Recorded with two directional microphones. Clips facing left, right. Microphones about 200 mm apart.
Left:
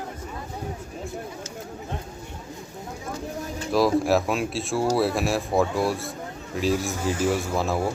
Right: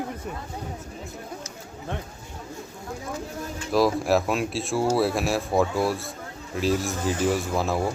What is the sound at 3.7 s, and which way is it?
A man's voice, centre (ahead or behind).